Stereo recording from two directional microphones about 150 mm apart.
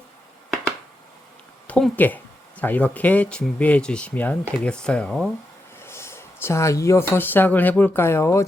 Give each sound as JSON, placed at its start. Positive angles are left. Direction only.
{"t": 1.6, "sound": "speech", "side_deg": 10}
{"t": 5.8, "sound": "speech", "side_deg": 15}